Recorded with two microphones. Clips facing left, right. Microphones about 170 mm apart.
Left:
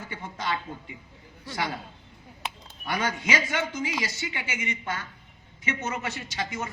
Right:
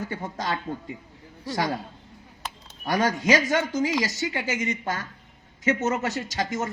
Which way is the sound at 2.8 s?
40° right (ahead or behind).